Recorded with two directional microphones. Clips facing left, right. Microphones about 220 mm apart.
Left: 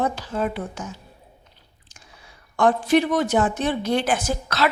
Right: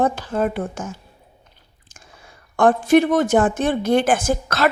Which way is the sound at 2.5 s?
50° right (ahead or behind).